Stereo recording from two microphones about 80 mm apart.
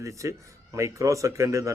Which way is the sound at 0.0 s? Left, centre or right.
Right.